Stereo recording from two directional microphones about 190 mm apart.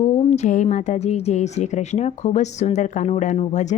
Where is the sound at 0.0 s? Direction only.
35° left (ahead or behind).